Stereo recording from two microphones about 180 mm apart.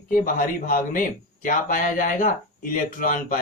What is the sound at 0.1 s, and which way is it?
Speech, 50° left (ahead or behind).